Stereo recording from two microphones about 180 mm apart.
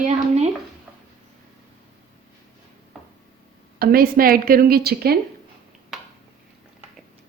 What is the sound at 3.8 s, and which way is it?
Speech, 55° right (ahead or behind).